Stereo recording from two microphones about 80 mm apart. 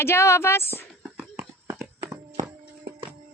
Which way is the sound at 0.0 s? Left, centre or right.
Left.